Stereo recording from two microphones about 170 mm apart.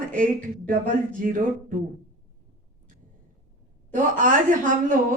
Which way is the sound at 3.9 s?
50° right (ahead or behind).